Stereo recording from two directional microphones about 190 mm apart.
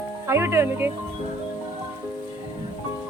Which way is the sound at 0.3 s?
15° right (ahead or behind).